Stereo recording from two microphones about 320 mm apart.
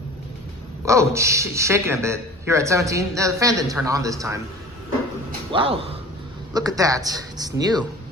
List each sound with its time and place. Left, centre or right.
0.9 s a man's voice: centre
5.5 s a man's voice: centre